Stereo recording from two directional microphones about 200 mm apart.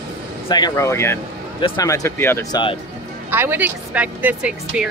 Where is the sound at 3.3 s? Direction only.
10° right (ahead or behind).